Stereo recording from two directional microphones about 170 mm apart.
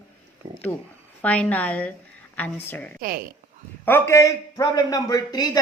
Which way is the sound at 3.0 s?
60° right (ahead or behind).